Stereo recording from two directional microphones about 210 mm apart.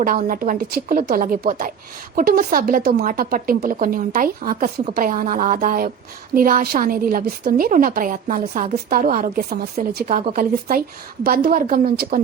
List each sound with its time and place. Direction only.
0.0 s a woman's voice: 40° right (ahead or behind)